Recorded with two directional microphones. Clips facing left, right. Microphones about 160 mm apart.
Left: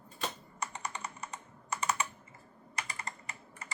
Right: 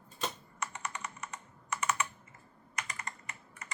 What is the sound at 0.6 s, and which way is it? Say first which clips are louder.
Computer keyboard: even; 35° left (ahead or behind).